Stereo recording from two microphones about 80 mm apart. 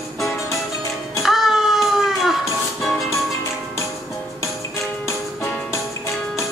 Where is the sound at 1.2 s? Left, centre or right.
Centre.